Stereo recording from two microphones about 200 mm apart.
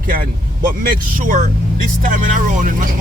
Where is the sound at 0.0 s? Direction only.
45° right (ahead or behind).